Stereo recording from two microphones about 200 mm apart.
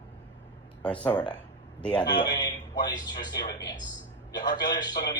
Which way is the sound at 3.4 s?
55° left (ahead or behind).